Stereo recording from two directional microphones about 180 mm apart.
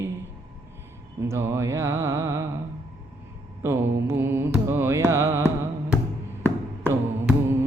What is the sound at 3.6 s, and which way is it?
Music, 15° right (ahead or behind).